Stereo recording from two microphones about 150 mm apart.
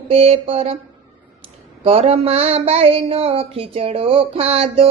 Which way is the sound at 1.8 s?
40° right (ahead or behind).